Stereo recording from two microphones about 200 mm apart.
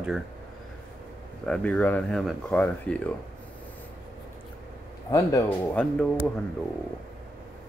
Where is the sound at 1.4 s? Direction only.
5° left (ahead or behind).